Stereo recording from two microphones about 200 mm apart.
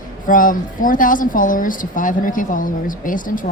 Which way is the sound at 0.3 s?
40° left (ahead or behind).